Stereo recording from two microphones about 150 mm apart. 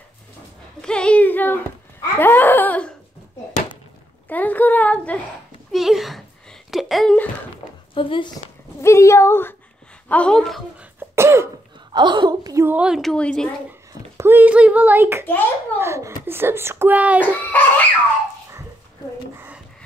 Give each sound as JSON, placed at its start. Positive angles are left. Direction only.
{"t": 0.8, "sound": "a sound", "side_deg": 5}
{"t": 4.3, "sound": "a sound", "side_deg": 10}
{"t": 5.7, "sound": "a sound", "side_deg": 0}
{"t": 7.9, "sound": "a woman's voice", "side_deg": 35}
{"t": 8.8, "sound": "speech", "side_deg": 20}
{"t": 10.8, "sound": "cough", "side_deg": -15}
{"t": 11.9, "sound": "a woman's voice", "side_deg": -30}
{"t": 12.6, "sound": "a woman's voice", "side_deg": -5}
{"t": 14.1, "sound": "speech", "side_deg": -15}
{"t": 17.5, "sound": "speech", "side_deg": 10}